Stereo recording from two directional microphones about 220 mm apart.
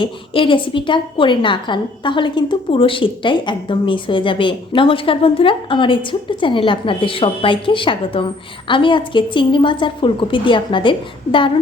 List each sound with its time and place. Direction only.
0.0 s a woman's voice: 25° left (ahead or behind)